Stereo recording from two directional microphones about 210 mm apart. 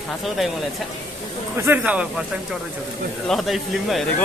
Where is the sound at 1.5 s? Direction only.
10° right (ahead or behind).